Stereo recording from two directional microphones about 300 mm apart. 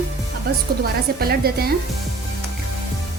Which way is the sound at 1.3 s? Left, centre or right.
Right.